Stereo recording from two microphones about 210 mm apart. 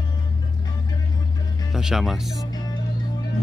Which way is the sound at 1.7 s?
Centre (ahead or behind).